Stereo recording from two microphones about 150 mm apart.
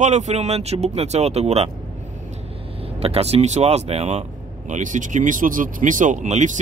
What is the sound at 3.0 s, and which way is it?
Speech, 40° right (ahead or behind).